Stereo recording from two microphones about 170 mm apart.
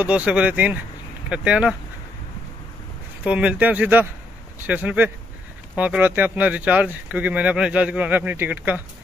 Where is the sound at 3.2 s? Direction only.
10° right (ahead or behind).